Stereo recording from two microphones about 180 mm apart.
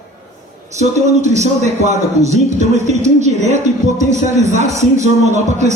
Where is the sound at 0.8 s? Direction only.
40° right (ahead or behind).